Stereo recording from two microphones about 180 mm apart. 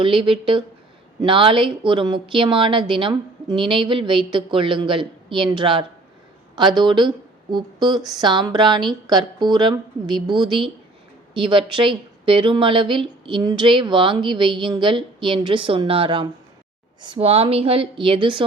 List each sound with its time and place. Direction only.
0.0 s a woman's voice: 30° right (ahead or behind)